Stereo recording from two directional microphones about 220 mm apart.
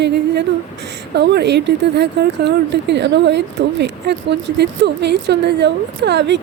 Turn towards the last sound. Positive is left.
turn(degrees=-55)  # may be behind; listen again after turning